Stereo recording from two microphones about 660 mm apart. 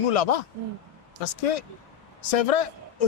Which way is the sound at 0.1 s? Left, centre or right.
Left.